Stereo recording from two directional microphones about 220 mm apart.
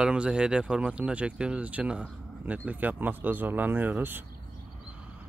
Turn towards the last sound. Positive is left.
turn(degrees=-10)  # may be behind; listen again after turning